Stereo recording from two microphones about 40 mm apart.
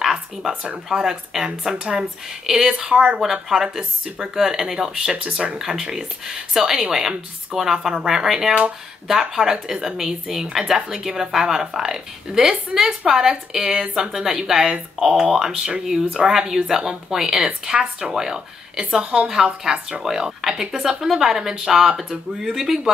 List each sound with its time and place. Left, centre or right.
0.0 s a sound: centre
0.8 s a woman's voice: centre
2.8 s speech: right
3.2 s a woman's voice: centre
5.1 s speech: right
5.6 s a woman's voice: centre